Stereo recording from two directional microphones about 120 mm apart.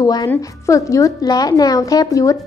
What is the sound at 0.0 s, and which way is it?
A woman's voice, 35° left (ahead or behind).